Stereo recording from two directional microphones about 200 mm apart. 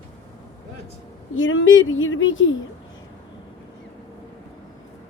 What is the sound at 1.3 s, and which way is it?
Speech, 80° left.